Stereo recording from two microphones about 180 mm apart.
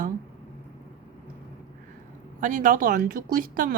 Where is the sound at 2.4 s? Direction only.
45° right (ahead or behind).